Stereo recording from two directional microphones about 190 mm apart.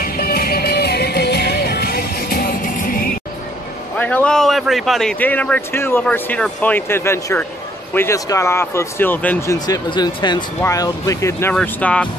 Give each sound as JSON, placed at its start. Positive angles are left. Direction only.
{"t": 0.0, "sound": "music", "side_deg": 50}
{"t": 4.0, "sound": "a man's voice", "side_deg": 5}
{"t": 9.7, "sound": "a man's voice", "side_deg": 20}